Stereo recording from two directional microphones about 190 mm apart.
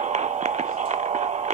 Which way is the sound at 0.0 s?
40° right (ahead or behind).